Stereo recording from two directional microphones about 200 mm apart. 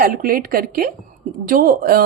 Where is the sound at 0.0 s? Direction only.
45° right (ahead or behind).